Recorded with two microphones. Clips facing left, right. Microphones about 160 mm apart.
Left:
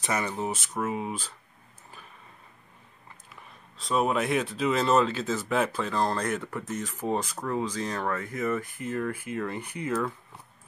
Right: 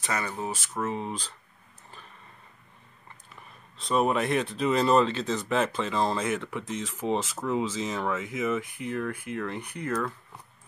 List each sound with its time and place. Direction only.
0.0 s speech: 20° left (ahead or behind)
0.7 s speech: 10° left (ahead or behind)
3.7 s speech: centre (ahead or behind)